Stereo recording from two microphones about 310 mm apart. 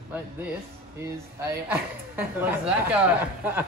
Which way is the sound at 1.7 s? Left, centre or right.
Centre.